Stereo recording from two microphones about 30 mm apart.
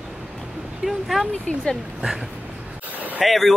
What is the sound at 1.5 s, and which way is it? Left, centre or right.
Speech, left.